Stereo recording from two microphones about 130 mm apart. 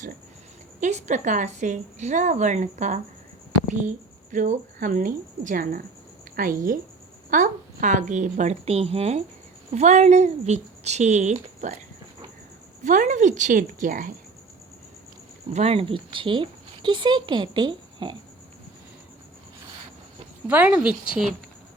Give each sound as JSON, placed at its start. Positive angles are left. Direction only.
{"t": 0.8, "sound": "a woman's voice", "side_deg": -60}
{"t": 12.8, "sound": "a woman's voice", "side_deg": -75}
{"t": 15.5, "sound": "speech", "side_deg": -50}
{"t": 20.5, "sound": "speech", "side_deg": -10}